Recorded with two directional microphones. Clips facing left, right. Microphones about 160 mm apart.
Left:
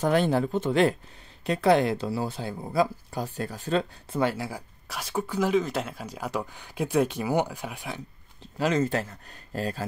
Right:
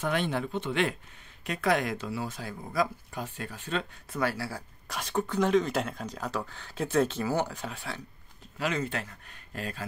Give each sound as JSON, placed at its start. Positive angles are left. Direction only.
{"t": 0.0, "sound": "speech", "side_deg": 40}
{"t": 4.2, "sound": "speech", "side_deg": 20}
{"t": 4.8, "sound": "speech", "side_deg": 0}
{"t": 8.5, "sound": "speech", "side_deg": 40}